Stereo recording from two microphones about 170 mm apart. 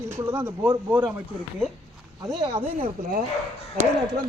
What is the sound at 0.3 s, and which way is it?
Speech, 15° right (ahead or behind).